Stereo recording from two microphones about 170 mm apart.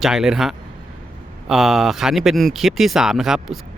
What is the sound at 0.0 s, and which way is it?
Speech, 5° right (ahead or behind).